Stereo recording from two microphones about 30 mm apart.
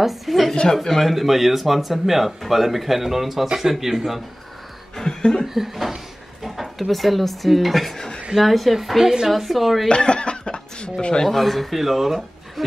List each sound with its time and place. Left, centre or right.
0.0 s speech: centre
0.8 s speech: centre
1.1 s speech: centre
5.1 s chuckle: left
5.5 s speech: centre
9.8 s speech: left
11.2 s speech: centre